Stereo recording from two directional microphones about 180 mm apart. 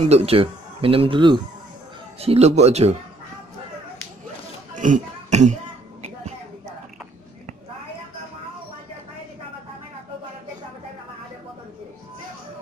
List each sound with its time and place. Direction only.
0.0 s speech: 35° right (ahead or behind)
4.7 s speech: 45° right (ahead or behind)